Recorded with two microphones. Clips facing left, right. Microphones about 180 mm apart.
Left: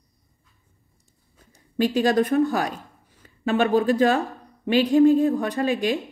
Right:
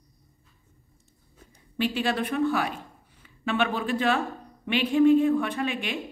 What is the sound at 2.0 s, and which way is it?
A woman's voice, 40° left (ahead or behind).